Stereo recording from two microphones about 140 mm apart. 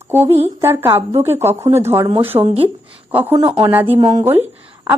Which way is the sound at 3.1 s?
15° right (ahead or behind).